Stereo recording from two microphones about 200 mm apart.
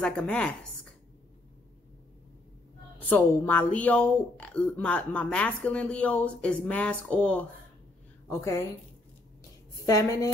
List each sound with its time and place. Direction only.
0.0 s speech: 5° left (ahead or behind)
3.0 s a woman's voice: 10° left (ahead or behind)
9.8 s a woman's voice: 15° left (ahead or behind)